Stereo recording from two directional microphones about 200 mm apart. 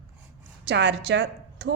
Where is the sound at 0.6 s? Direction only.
55° right (ahead or behind).